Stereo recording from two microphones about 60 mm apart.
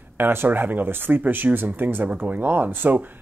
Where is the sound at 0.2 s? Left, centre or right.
Right.